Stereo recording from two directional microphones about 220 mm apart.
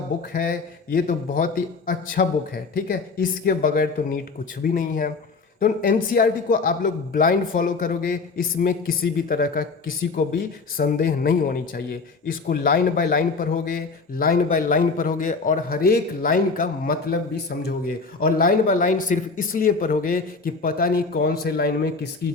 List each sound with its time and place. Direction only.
0.9 s a man's voice: 40° left (ahead or behind)
18.3 s a man's voice: 40° left (ahead or behind)